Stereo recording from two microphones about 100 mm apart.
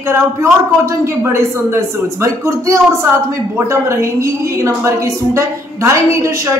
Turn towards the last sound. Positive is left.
turn(degrees=-30)  # may be behind; listen again after turning